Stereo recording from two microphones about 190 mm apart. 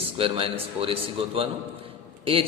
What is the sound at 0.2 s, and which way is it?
A man's voice, 30° right (ahead or behind).